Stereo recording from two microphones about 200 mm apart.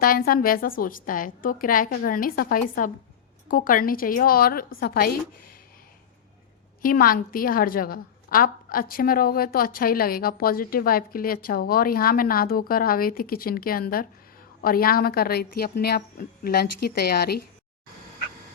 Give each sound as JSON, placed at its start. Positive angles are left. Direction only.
{"t": 0.0, "sound": "a woman's voice", "side_deg": 45}
{"t": 6.8, "sound": "a woman's voice", "side_deg": 45}